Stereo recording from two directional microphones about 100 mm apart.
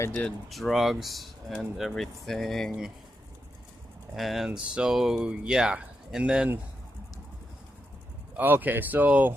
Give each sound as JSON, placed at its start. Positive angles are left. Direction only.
{"t": 0.1, "sound": "speech", "side_deg": 10}
{"t": 0.5, "sound": "speech", "side_deg": 0}
{"t": 4.1, "sound": "speech", "side_deg": 0}
{"t": 8.4, "sound": "speech", "side_deg": -20}